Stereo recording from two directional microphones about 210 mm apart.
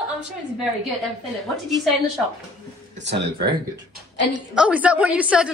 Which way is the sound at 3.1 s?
50° right (ahead or behind).